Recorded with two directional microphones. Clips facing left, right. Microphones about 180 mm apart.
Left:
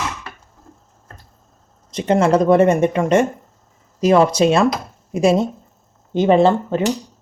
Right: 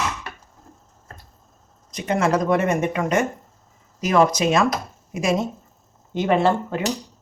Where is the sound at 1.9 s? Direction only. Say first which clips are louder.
Left 6 dB; 30° left (ahead or behind).